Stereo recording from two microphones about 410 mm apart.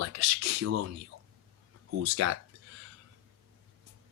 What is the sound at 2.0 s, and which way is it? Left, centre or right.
Speech, right.